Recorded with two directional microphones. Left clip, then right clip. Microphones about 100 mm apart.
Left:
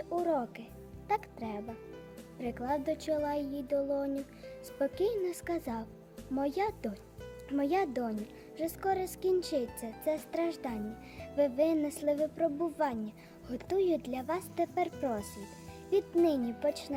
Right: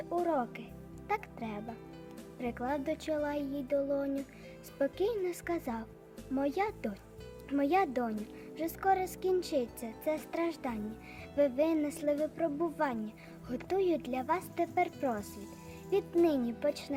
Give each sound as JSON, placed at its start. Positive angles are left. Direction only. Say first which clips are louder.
{"t": 0.3, "sound": "speech", "louder": "even", "side_deg": 30}
{"t": 16.2, "sound": "speech", "louder": "even", "side_deg": 30}